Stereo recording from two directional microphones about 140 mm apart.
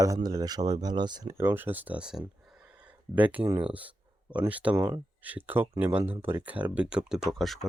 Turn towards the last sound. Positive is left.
turn(degrees=0)  # may be behind; listen again after turning